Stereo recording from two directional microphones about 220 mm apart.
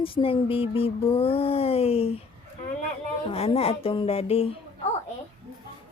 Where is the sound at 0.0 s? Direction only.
25° left (ahead or behind).